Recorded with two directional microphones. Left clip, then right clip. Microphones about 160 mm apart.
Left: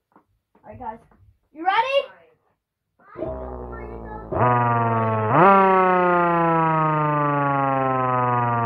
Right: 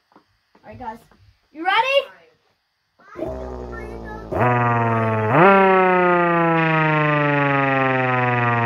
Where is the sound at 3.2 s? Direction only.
30° right (ahead or behind).